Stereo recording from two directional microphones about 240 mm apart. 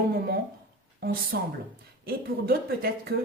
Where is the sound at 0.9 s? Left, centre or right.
Right.